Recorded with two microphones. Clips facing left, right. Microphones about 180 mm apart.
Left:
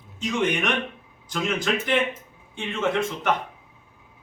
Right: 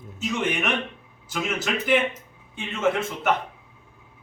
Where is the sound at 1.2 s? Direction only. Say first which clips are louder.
Left 2 dB; 5° right (ahead or behind).